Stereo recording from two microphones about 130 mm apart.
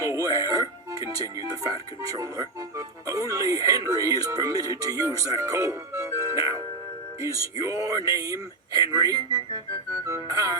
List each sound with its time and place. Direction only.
0.0 s music: 25° right (ahead or behind)
1.4 s speech: 30° right (ahead or behind)
10.1 s music: 25° right (ahead or behind)